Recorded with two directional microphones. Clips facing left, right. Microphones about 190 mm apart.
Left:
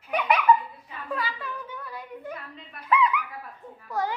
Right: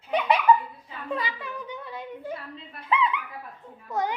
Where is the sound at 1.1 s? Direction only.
20° right (ahead or behind).